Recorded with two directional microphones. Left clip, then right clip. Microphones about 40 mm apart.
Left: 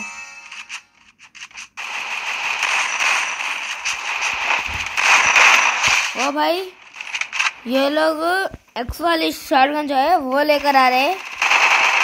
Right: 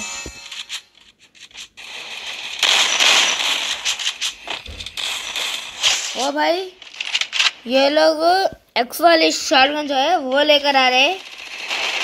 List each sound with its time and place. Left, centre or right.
0.0 s music: left
1.8 s fireworks: centre
5.8 s a sound: centre
6.4 s a woman's voice: left
7.0 s coin: left
7.6 s a woman's voice: left
8.3 s a woman's voice: left
9.8 s a woman's voice: left
10.3 s a woman's voice: left
11.1 s firecracker: left